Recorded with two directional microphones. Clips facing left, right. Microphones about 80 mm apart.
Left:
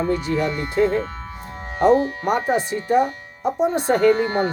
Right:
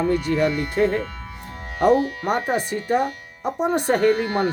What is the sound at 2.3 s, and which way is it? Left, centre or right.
Speech, right.